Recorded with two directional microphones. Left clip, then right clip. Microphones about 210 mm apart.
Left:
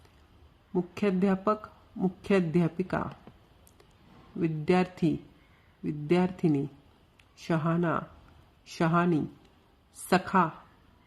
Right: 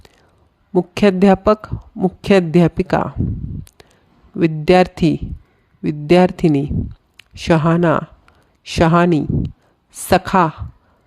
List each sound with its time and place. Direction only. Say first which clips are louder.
0.7 s speech: right 15 dB; 45° right (ahead or behind)
3.8 s a sound: right 13 dB; 50° right (ahead or behind)
4.4 s speech: right 15 dB; 50° right (ahead or behind)